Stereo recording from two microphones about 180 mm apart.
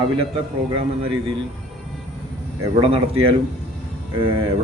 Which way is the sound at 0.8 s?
30° right (ahead or behind).